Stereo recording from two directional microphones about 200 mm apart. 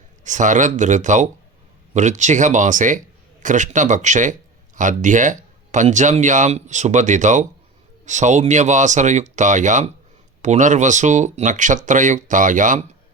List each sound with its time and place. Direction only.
0.3 s speech: 40° right (ahead or behind)